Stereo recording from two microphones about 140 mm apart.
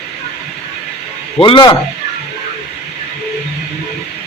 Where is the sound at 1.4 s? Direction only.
35° left (ahead or behind).